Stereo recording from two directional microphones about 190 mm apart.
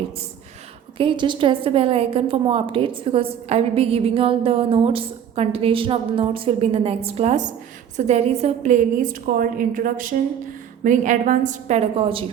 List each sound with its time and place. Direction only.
0.9 s a woman's voice: 25° right (ahead or behind)